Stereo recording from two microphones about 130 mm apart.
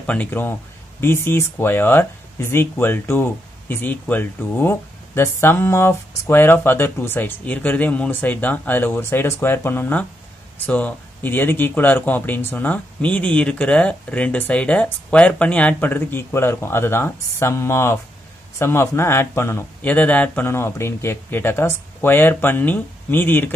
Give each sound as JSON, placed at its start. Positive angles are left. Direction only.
{"t": 0.0, "sound": "speech", "side_deg": 10}